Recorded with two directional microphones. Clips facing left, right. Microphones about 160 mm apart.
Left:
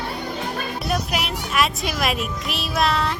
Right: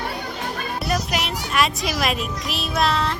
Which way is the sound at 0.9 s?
Centre (ahead or behind).